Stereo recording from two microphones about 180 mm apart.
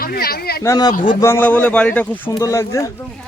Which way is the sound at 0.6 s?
20° left (ahead or behind).